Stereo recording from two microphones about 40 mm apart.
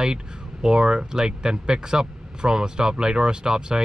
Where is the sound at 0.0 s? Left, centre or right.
Centre.